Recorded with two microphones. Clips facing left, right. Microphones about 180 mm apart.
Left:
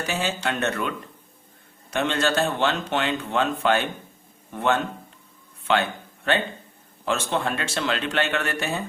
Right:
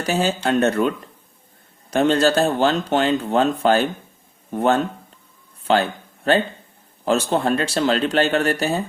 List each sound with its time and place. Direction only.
0.0 s a man's voice: 35° right (ahead or behind)